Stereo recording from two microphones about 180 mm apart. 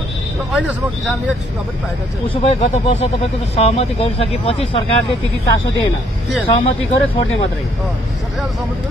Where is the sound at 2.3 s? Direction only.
35° left (ahead or behind).